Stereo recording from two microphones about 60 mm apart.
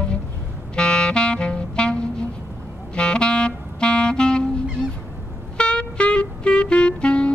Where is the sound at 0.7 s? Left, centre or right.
Centre.